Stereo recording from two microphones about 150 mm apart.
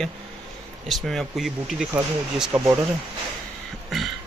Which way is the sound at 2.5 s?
20° right (ahead or behind).